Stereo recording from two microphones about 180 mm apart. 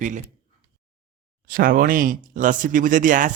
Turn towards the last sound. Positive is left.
turn(degrees=-45)  # may be behind; listen again after turning